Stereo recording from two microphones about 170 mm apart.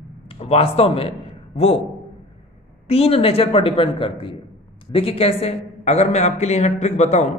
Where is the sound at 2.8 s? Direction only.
35° left (ahead or behind).